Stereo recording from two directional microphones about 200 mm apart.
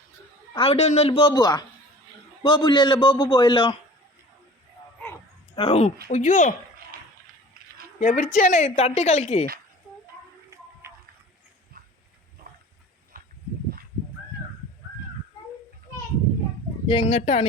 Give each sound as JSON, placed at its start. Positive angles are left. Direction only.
{"t": 0.5, "sound": "a man's voice", "side_deg": 30}
{"t": 5.5, "sound": "a man's voice", "side_deg": 30}
{"t": 8.0, "sound": "speech", "side_deg": 40}
{"t": 10.5, "sound": "a sound", "side_deg": -15}
{"t": 13.1, "sound": "a sound", "side_deg": -45}
{"t": 16.9, "sound": "speech", "side_deg": 30}